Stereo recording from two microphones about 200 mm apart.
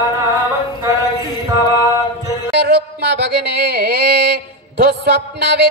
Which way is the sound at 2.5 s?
55° right (ahead or behind).